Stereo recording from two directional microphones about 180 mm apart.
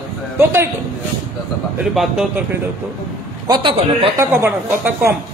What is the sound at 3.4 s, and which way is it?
Speech, 25° right (ahead or behind).